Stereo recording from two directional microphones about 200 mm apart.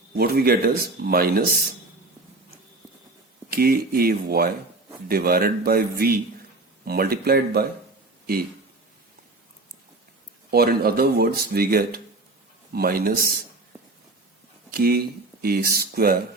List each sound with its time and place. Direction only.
0.1 s speech: 50° right (ahead or behind)
3.5 s speech: 50° right (ahead or behind)
10.5 s speech: 50° right (ahead or behind)
14.7 s speech: 50° right (ahead or behind)